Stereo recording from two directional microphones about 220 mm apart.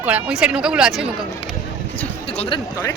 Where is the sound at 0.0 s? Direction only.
5° right (ahead or behind).